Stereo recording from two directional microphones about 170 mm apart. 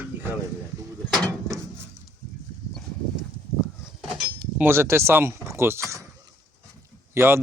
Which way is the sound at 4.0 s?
Centre (ahead or behind).